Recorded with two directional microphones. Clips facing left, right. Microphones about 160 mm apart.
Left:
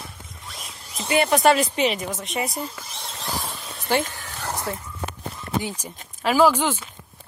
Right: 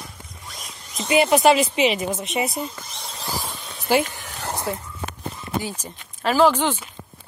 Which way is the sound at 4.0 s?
15° right (ahead or behind).